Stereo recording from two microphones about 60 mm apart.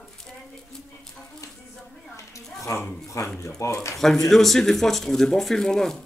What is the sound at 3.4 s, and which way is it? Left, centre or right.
Speech, left.